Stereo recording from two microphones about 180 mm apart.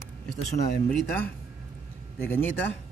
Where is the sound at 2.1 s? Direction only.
10° left (ahead or behind).